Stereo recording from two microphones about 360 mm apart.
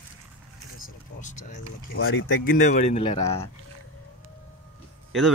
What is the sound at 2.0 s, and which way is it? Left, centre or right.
Speech, left.